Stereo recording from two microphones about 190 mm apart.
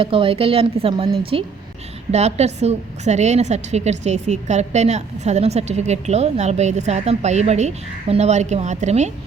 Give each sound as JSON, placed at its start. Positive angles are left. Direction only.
{"t": 0.0, "sound": "a woman's voice", "side_deg": -30}